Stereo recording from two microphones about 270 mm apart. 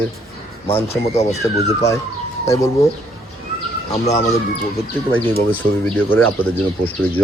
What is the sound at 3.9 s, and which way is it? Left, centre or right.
Speech, left.